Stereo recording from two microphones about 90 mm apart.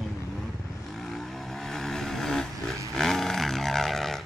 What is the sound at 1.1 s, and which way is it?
Vehicle, 5° left (ahead or behind).